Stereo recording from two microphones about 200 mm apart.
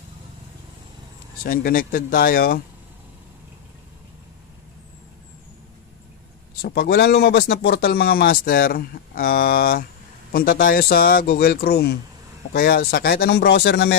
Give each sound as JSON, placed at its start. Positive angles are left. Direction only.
{"t": 1.4, "sound": "speech", "side_deg": 45}
{"t": 6.6, "sound": "speech", "side_deg": 50}